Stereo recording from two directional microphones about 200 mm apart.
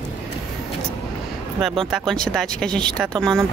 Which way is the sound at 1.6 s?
Centre (ahead or behind).